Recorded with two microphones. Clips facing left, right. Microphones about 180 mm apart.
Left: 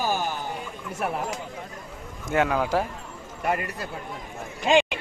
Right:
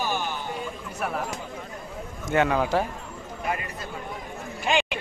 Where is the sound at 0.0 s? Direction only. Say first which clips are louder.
Left 2 dB; 40° left (ahead or behind).